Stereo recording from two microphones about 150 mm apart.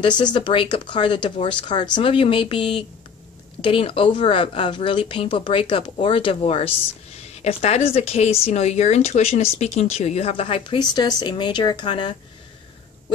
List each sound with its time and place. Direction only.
0.2 s speech: 30° left (ahead or behind)